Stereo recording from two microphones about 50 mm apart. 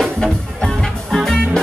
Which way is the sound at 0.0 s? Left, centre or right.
Centre.